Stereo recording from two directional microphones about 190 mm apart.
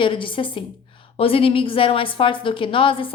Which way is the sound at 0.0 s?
25° left (ahead or behind).